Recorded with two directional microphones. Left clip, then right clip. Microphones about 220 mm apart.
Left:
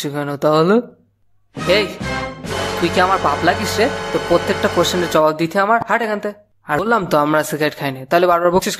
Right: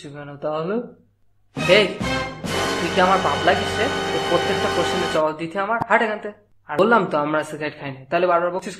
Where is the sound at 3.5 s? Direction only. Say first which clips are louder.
Even; 30° left (ahead or behind).